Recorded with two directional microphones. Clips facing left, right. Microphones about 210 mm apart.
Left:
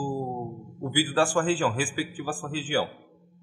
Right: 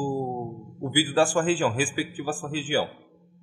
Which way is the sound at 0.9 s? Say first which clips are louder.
Right 2 dB; 10° right (ahead or behind).